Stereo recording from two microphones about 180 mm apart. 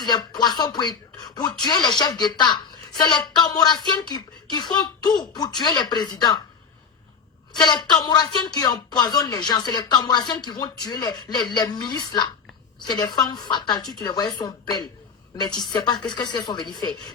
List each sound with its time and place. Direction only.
0.0 s speech: 25° left (ahead or behind)
7.5 s speech: 25° left (ahead or behind)